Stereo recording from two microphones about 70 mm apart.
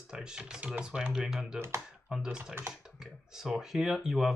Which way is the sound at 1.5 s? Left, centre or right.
Right.